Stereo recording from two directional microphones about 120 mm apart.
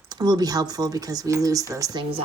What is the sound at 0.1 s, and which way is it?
Speech, 35° right (ahead or behind).